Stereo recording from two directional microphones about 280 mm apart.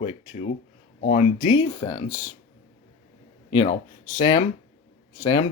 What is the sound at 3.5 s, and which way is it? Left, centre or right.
Speech, centre.